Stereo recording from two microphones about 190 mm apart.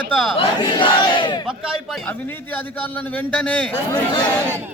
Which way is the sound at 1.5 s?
Centre (ahead or behind).